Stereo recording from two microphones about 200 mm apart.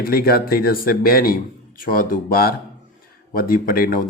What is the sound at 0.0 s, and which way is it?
Speech, 50° left (ahead or behind).